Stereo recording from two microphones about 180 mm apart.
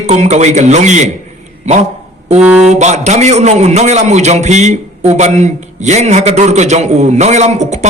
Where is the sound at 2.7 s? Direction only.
40° right (ahead or behind).